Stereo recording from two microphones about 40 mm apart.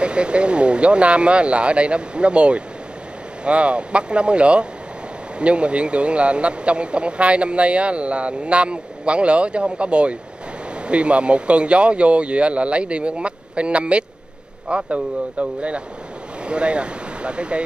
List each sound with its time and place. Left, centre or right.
0.0 s speech: right